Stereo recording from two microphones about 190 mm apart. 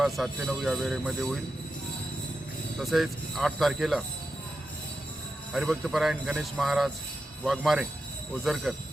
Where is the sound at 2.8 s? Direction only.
Centre (ahead or behind).